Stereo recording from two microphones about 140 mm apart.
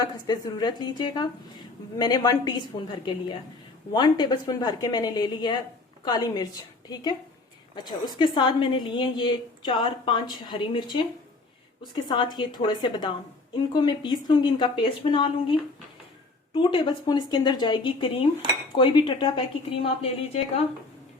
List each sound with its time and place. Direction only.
0.0 s a woman's voice: 30° left (ahead or behind)
16.6 s a woman's voice: 35° left (ahead or behind)